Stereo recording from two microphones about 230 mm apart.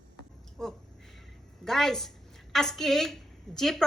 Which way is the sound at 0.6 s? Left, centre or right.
Centre.